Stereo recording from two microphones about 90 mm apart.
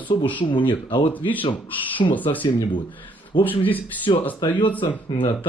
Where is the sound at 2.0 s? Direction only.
80° left.